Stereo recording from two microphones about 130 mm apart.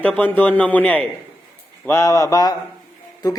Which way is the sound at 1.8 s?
25° left (ahead or behind).